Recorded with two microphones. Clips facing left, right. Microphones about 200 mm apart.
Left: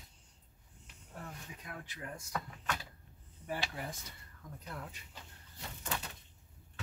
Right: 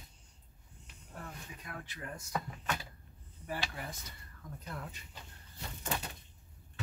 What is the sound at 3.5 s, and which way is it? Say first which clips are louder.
Speech: left 1 dB; 20° left (ahead or behind).